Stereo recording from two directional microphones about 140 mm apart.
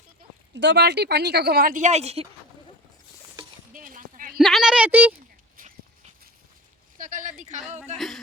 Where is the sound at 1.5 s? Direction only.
80° right; by 2.3 s 45° right (ahead or behind).